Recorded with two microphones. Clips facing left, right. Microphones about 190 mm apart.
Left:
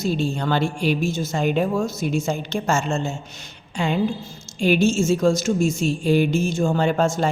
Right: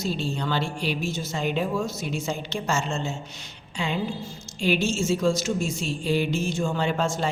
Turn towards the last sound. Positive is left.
turn(degrees=45)  # may be behind; listen again after turning